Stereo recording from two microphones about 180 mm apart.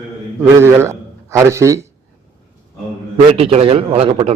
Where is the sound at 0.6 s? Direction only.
15° right (ahead or behind).